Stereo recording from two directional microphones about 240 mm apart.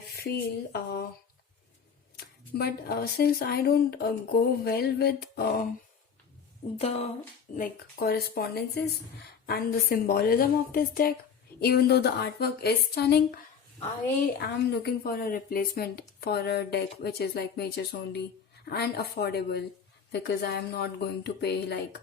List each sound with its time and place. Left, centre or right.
0.2 s speech: left
2.1 s speech: left
6.7 s speech: left
7.5 s speech: left
14.3 s speech: left